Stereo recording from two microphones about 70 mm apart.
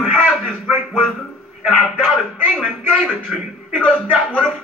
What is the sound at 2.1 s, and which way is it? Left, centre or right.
Speech, right.